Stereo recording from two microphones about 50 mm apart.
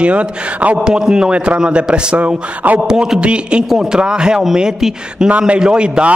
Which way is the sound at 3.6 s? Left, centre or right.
Centre.